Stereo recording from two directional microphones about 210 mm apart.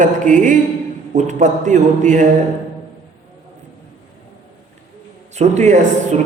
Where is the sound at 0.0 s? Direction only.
35° right (ahead or behind).